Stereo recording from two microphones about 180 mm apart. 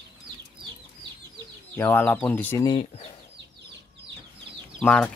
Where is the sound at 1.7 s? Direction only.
10° left (ahead or behind).